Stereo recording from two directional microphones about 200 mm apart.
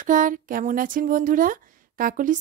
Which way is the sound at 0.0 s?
40° right (ahead or behind).